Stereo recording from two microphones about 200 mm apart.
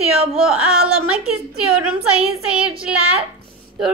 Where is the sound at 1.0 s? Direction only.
5° right (ahead or behind).